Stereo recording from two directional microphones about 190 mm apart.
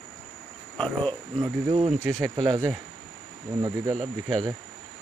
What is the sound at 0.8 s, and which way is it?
Speech, 5° left (ahead or behind).